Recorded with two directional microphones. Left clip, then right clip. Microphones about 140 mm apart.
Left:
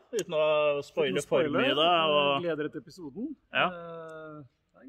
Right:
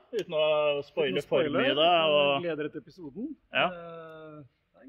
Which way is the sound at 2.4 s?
35° left (ahead or behind).